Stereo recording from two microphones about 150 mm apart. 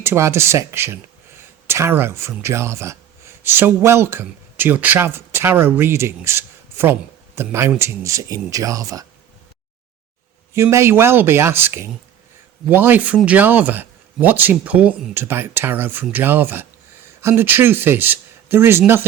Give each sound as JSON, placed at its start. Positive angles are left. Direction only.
{"t": 0.0, "sound": "speech", "side_deg": -15}
{"t": 10.5, "sound": "speech", "side_deg": -20}